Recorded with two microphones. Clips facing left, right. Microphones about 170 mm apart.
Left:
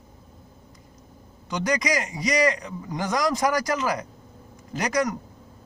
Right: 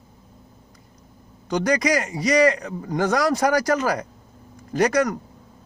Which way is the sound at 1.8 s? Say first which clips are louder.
Right 4 dB; 55° right (ahead or behind).